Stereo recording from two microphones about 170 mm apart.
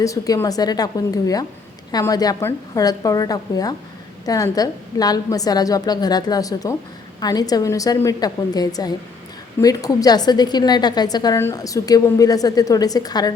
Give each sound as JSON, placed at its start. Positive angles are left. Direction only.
{"t": 0.0, "sound": "a woman's voice", "side_deg": 20}